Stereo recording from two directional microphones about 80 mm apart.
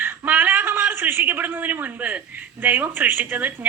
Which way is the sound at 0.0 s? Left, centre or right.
Right.